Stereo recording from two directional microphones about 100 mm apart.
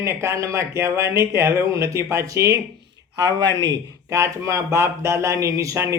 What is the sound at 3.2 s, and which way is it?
Speech, 45° right (ahead or behind).